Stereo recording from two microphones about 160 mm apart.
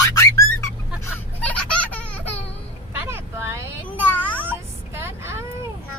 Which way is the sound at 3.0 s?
15° right (ahead or behind).